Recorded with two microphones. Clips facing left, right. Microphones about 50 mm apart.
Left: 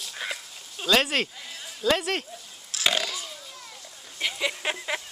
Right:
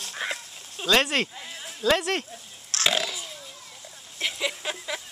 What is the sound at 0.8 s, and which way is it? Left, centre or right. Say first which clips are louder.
Speech: right 1 dB; centre.